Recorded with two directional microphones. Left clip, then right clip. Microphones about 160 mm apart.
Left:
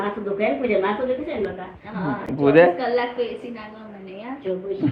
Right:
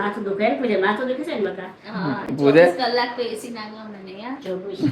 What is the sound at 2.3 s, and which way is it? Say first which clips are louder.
Speech: right 1 dB; 20° right (ahead or behind).